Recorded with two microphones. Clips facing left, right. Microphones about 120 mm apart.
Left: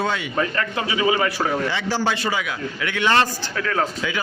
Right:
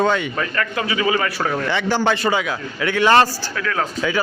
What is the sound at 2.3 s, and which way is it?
A man's voice, 30° right (ahead or behind).